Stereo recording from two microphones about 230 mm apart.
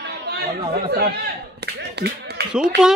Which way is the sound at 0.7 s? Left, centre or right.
Right.